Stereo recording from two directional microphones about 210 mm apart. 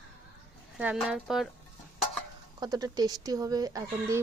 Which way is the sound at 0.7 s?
5° right (ahead or behind).